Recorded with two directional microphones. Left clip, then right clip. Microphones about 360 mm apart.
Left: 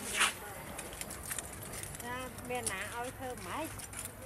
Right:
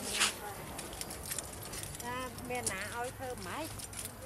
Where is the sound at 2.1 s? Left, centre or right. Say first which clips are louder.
Even; centre.